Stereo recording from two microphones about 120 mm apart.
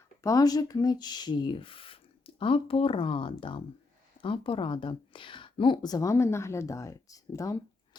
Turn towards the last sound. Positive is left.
turn(degrees=25)  # may be behind; listen again after turning